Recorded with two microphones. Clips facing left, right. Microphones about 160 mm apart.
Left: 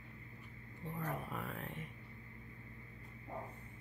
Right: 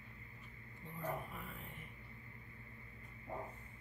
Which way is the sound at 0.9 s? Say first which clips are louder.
Left 1 dB; 80° left.